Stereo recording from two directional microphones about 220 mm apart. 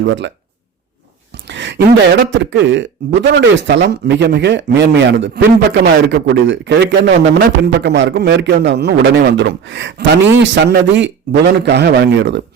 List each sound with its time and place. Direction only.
0.1 s a man's voice: 55° right (ahead or behind)